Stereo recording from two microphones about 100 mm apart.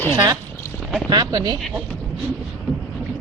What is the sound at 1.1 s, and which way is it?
Speech, 40° right (ahead or behind).